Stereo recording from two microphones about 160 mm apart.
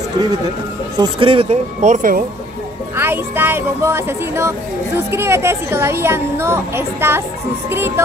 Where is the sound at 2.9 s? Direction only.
15° right (ahead or behind).